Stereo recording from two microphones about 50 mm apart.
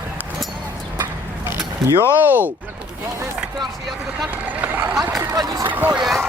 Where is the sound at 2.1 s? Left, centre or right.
Right.